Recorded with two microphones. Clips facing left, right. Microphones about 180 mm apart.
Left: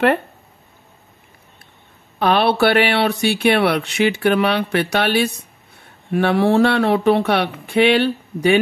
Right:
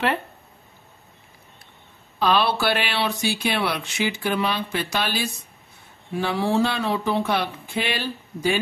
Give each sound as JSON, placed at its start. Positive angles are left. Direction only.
{"t": 2.1, "sound": "speech", "side_deg": 60}